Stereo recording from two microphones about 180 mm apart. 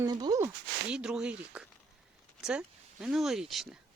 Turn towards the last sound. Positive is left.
turn(degrees=0)  # may be behind; listen again after turning